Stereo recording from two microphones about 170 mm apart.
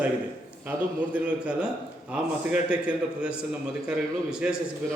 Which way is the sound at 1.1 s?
5° right (ahead or behind).